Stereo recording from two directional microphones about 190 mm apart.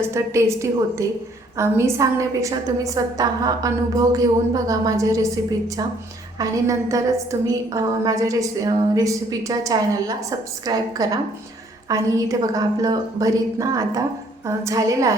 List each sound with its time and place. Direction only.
0.1 s a woman's voice: 15° right (ahead or behind)